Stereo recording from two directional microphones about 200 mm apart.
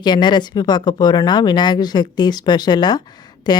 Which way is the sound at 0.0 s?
20° left (ahead or behind).